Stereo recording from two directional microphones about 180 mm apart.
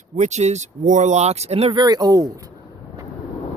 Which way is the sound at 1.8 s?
20° right (ahead or behind).